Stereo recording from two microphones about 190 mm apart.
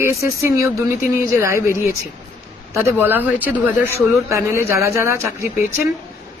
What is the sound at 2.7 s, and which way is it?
Speech, 10° right (ahead or behind).